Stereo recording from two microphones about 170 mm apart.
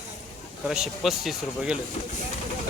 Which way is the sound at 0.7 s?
5° right (ahead or behind).